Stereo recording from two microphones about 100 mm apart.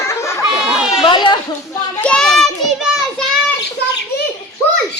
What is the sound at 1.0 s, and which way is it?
Speech, 50° left (ahead or behind).